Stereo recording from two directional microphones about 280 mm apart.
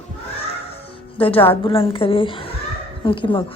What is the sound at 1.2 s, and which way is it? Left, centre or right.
A woman's voice, centre.